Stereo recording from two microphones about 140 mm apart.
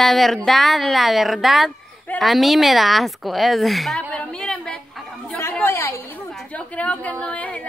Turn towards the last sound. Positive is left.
turn(degrees=10)  # may be behind; listen again after turning